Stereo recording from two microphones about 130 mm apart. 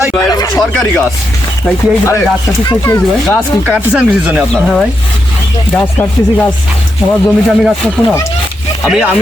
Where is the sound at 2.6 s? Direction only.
20° left (ahead or behind).